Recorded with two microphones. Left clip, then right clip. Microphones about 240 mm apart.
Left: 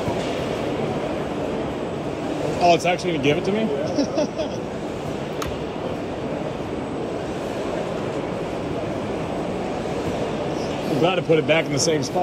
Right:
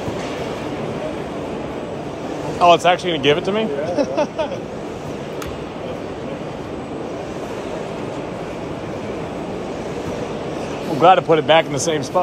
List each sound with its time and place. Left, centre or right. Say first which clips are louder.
2.6 s speech: right 5 dB; centre
3.1 s a man's voice: right 4 dB; left
11.1 s a man's voice: right 8 dB; left